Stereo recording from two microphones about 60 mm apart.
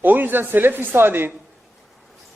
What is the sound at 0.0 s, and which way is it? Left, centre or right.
A man's voice, right.